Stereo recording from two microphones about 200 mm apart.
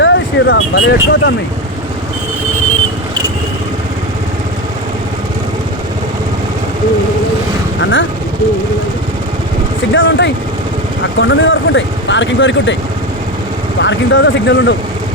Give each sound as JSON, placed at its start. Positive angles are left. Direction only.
{"t": 0.0, "sound": "speech", "side_deg": 65}
{"t": 7.8, "sound": "speech", "side_deg": 70}
{"t": 9.9, "sound": "speech", "side_deg": 65}
{"t": 13.7, "sound": "speech", "side_deg": 65}